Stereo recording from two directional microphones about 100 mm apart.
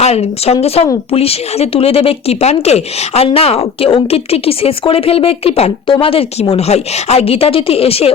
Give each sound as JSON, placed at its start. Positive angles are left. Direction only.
{"t": 0.0, "sound": "speech", "side_deg": 90}